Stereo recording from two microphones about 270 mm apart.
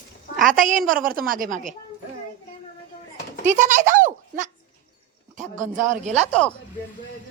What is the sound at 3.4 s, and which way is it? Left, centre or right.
A woman's voice, right.